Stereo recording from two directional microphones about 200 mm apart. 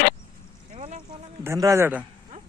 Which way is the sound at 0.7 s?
35° right (ahead or behind).